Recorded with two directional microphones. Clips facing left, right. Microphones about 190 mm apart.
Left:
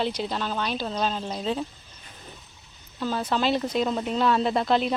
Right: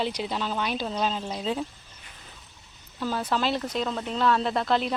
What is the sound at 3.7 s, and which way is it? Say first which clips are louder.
Speech: left 4 dB; 15° left (ahead or behind).